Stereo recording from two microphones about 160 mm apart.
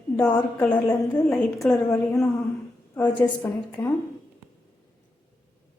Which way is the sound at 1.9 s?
20° left (ahead or behind).